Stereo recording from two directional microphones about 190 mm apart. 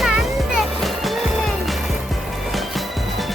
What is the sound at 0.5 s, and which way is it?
Music, centre (ahead or behind).